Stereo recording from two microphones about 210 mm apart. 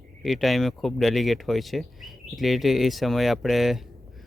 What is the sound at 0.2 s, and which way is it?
Speech, centre (ahead or behind).